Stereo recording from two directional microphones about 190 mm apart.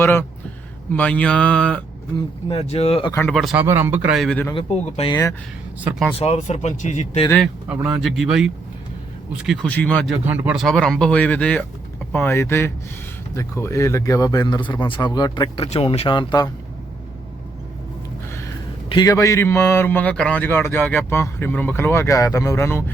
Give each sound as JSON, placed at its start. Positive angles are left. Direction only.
{"t": 0.0, "sound": "a man's voice", "side_deg": 10}
{"t": 2.1, "sound": "speech", "side_deg": 30}
{"t": 3.1, "sound": "a man's voice", "side_deg": 10}
{"t": 3.3, "sound": "speech", "side_deg": -5}
{"t": 4.5, "sound": "speech", "side_deg": 30}
{"t": 6.1, "sound": "speech", "side_deg": 35}
{"t": 7.3, "sound": "a man's voice", "side_deg": 5}
{"t": 18.3, "sound": "a sound", "side_deg": 15}
{"t": 18.9, "sound": "a man's voice", "side_deg": 20}